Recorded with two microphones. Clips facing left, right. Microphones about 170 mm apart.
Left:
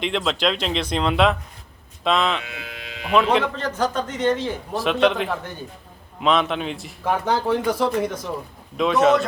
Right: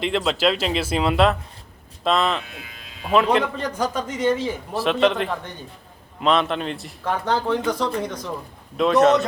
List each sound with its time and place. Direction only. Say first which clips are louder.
0.0 s speech: right 2 dB; centre (ahead or behind)
2.4 s speech: left 4 dB; 75° left (ahead or behind)
3.1 s a man's voice: even; centre (ahead or behind)